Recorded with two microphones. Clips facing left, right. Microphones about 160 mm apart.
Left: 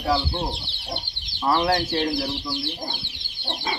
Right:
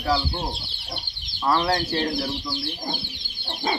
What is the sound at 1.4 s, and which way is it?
Speech, 10° left (ahead or behind).